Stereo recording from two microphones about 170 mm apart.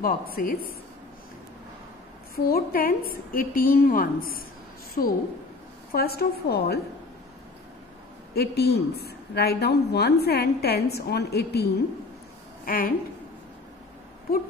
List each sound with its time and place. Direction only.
0.0 s a woman's voice: 60° left (ahead or behind)
2.3 s a woman's voice: 60° left (ahead or behind)
8.4 s a woman's voice: 70° left (ahead or behind)
12.6 s a woman's voice: 60° left (ahead or behind)